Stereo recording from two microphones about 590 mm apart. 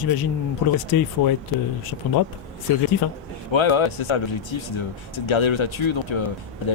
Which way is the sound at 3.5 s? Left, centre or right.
Left.